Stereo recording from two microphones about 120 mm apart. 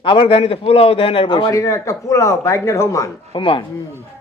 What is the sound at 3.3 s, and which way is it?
Speech, 45° left (ahead or behind).